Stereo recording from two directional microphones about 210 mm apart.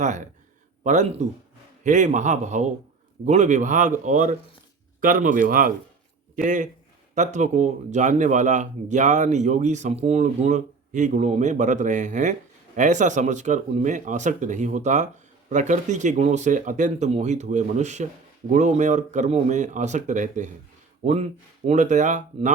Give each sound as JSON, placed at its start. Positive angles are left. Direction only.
{"t": 0.9, "sound": "speech", "side_deg": -35}